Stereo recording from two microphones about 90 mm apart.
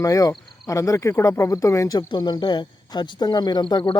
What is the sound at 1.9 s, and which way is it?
Speech, 55° left (ahead or behind).